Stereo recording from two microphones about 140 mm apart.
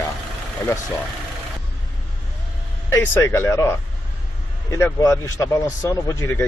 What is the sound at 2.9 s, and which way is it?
Speech, 20° left (ahead or behind).